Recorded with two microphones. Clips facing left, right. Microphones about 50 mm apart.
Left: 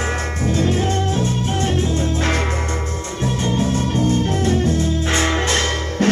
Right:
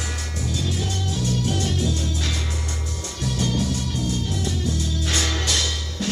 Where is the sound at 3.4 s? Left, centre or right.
Left.